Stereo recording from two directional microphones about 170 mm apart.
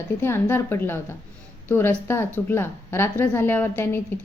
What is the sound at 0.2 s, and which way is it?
A woman's voice, 15° left (ahead or behind).